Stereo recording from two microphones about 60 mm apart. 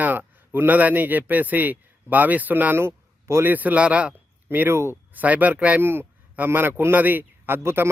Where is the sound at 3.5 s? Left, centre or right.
Right.